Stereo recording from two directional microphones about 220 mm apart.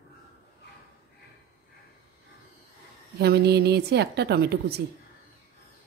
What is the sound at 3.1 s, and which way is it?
A woman's voice, 45° right (ahead or behind).